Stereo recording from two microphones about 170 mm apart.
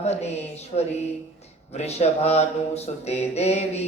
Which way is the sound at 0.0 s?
40° left (ahead or behind).